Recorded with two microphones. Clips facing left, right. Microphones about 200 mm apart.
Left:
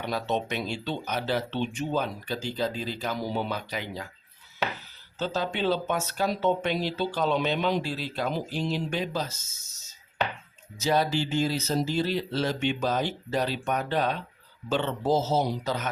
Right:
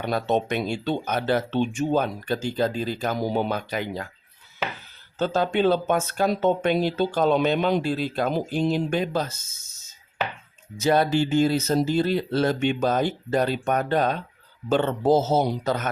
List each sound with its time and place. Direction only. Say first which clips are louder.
0.0 s speech: right 5 dB; 55° right (ahead or behind)
5.2 s speech: right 6 dB; 50° right (ahead or behind)
10.8 s speech: right 5 dB; 55° right (ahead or behind)